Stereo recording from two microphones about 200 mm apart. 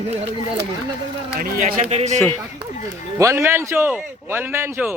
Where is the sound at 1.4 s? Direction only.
45° right (ahead or behind).